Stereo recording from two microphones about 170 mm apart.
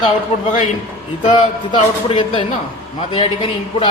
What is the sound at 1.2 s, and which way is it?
A man's voice, 30° left (ahead or behind).